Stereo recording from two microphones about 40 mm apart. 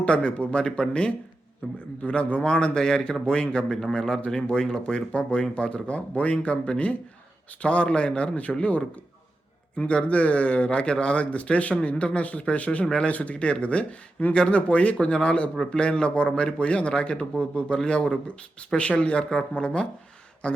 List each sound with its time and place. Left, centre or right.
0.0 s speech: left
1.6 s a man's voice: left